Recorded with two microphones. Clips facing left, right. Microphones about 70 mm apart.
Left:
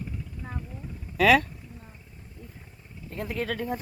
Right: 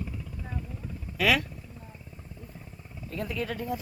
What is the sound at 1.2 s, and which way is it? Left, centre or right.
Speech, left.